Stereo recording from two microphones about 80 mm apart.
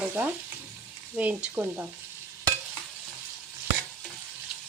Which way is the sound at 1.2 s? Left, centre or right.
Centre.